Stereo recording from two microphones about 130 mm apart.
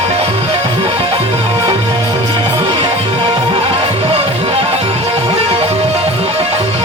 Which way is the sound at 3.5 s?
45° right (ahead or behind).